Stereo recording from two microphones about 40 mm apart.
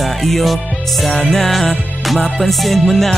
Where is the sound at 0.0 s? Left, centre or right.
Centre.